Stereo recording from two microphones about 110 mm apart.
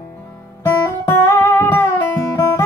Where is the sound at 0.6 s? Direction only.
20° left (ahead or behind).